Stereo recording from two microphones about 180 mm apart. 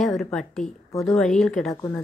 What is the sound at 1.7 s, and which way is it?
Speech, 15° left (ahead or behind).